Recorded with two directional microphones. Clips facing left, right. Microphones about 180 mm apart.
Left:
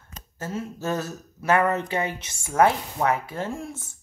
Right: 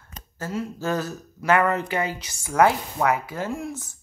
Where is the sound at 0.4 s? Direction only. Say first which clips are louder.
Right 2 dB; 25° left (ahead or behind).